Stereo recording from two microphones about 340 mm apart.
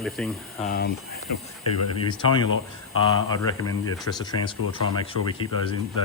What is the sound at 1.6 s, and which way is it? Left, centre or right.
Speech, left.